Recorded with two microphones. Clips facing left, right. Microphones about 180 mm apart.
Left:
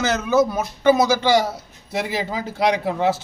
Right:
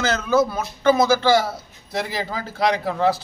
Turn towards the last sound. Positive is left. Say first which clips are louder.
# even
turn(degrees=15)  # may be behind; listen again after turning